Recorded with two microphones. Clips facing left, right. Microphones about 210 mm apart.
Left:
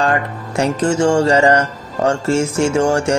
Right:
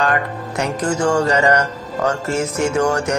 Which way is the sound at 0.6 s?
25° left (ahead or behind).